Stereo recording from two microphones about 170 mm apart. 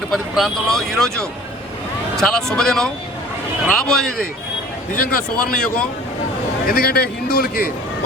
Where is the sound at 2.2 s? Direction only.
5° left (ahead or behind).